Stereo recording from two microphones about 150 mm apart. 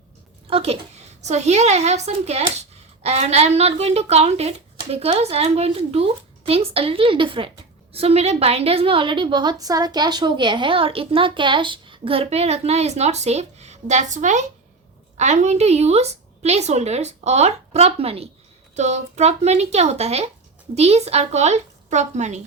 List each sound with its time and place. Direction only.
0.5 s a woman's voice: 40° right (ahead or behind)